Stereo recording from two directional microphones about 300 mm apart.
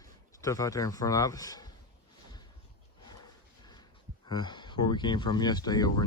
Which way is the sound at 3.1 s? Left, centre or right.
Centre.